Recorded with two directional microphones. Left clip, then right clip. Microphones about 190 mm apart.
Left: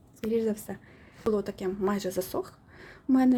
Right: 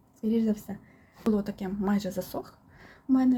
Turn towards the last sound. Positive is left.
turn(degrees=25)  # may be behind; listen again after turning